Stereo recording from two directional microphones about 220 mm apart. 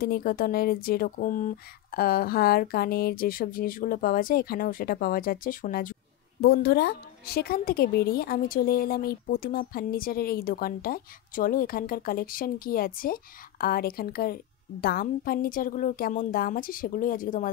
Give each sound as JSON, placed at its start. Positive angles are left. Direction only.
{"t": 0.0, "sound": "a woman's voice", "side_deg": 45}